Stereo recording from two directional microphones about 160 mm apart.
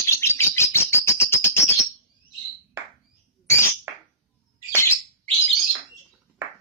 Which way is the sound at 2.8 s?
15° right (ahead or behind).